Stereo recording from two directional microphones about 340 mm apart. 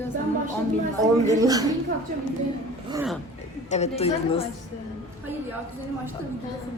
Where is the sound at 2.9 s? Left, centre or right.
Centre.